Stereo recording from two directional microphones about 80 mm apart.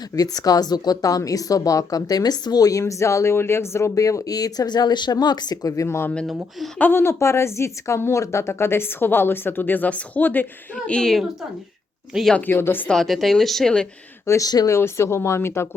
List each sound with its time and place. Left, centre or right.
0.2 s a woman's voice: left
6.7 s a woman's voice: left
10.8 s speech: centre
12.4 s a woman's voice: left
12.9 s speech: centre
14.3 s a woman's voice: left
14.7 s speech: left